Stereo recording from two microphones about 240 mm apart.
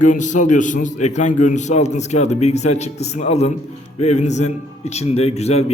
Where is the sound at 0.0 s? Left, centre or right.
Left.